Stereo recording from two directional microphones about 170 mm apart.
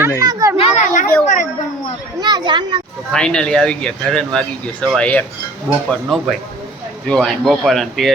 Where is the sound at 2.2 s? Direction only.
25° right (ahead or behind).